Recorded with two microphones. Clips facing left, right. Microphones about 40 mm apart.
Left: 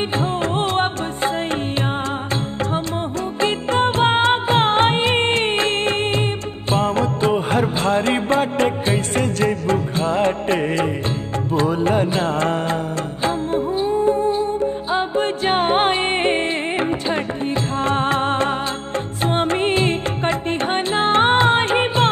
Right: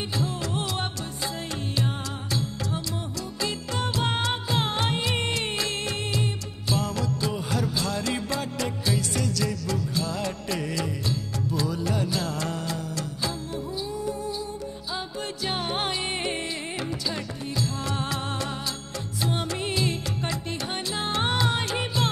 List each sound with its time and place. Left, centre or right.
0.2 s music: left
3.3 s music: left